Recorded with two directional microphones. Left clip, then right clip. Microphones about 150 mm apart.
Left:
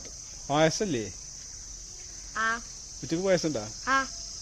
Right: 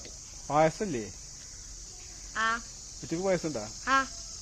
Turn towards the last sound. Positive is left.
turn(degrees=0)  # may be behind; listen again after turning